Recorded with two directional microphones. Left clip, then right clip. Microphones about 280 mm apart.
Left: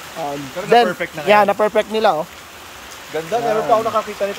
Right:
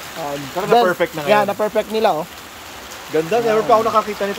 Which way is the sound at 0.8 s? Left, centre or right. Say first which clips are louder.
Right 4 dB; right.